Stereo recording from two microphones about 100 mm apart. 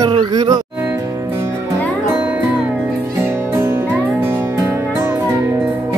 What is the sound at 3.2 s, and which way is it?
Music, 25° right (ahead or behind).